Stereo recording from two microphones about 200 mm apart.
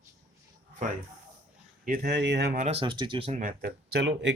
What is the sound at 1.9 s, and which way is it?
Speech, 55° right (ahead or behind).